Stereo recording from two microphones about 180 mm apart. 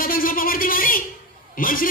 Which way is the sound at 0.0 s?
50° left (ahead or behind).